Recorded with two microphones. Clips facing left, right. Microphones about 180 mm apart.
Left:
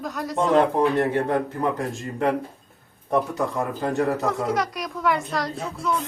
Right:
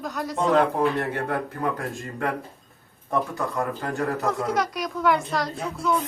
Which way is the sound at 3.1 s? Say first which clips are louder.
Left 3 dB; 20° left (ahead or behind).